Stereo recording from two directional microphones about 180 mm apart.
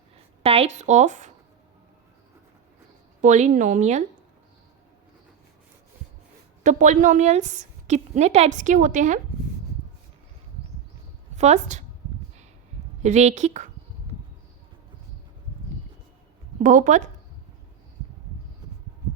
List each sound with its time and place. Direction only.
0.4 s speech: 35° right (ahead or behind)
3.2 s speech: 40° right (ahead or behind)
6.6 s a woman's voice: 45° right (ahead or behind)
11.3 s a woman's voice: 40° right (ahead or behind)
13.0 s speech: 40° right (ahead or behind)
16.6 s a woman's voice: 45° right (ahead or behind)